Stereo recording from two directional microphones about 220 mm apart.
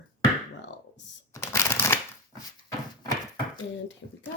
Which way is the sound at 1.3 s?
15° left (ahead or behind).